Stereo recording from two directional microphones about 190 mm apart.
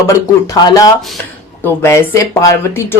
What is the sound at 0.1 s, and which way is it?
Speech, 20° left (ahead or behind).